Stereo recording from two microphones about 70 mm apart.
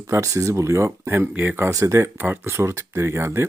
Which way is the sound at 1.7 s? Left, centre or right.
Right.